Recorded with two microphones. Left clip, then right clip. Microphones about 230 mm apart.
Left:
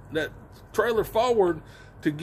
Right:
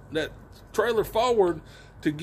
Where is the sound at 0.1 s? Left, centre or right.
Centre.